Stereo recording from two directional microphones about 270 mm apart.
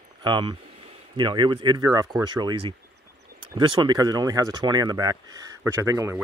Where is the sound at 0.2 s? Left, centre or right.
Centre.